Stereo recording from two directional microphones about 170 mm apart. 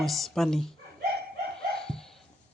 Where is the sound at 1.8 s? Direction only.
5° left (ahead or behind).